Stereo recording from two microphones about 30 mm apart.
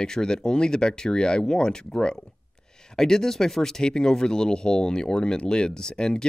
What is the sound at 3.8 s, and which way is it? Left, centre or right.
Speech, left.